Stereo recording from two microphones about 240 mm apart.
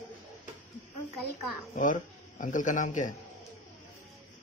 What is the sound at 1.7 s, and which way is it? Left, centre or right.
Speech, left.